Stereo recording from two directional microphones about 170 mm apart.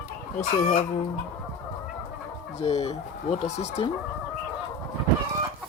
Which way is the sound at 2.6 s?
35° left (ahead or behind).